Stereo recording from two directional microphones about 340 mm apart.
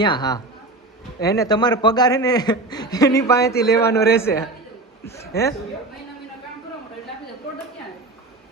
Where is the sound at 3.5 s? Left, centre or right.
Left.